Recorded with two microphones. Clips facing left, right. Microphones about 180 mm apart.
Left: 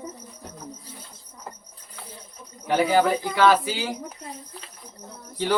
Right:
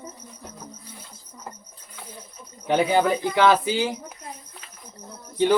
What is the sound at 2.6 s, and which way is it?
Speech, 20° right (ahead or behind).